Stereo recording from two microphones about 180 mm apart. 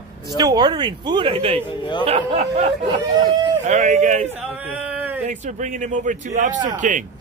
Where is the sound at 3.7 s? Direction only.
40° right (ahead or behind).